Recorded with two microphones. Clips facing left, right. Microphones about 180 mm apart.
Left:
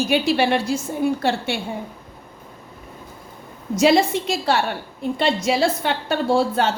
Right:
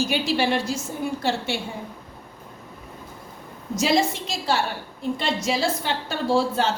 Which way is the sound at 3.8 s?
60° left (ahead or behind).